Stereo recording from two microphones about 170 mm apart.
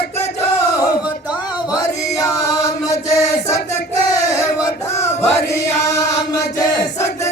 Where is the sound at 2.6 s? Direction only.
20° left (ahead or behind).